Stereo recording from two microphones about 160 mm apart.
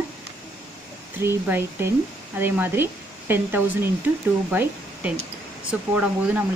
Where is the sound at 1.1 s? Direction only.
15° right (ahead or behind).